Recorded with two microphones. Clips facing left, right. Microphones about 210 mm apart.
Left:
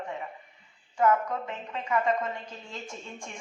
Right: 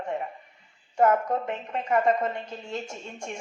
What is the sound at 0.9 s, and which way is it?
Speech, 45° right (ahead or behind).